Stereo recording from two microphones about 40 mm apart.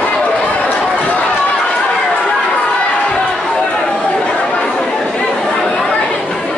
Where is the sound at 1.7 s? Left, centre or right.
Centre.